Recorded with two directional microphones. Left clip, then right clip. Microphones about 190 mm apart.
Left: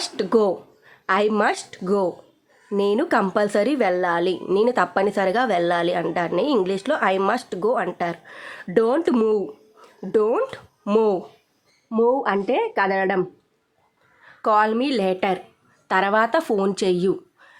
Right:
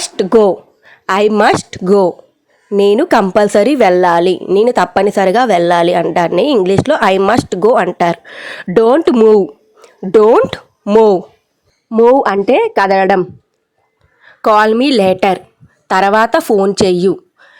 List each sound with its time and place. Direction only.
0.0 s a sound: 35° right (ahead or behind)
1.4 s a woman's voice: 45° right (ahead or behind)
10.8 s a woman's voice: 30° right (ahead or behind)
12.0 s speech: 45° right (ahead or behind)
14.4 s a woman's voice: 40° right (ahead or behind)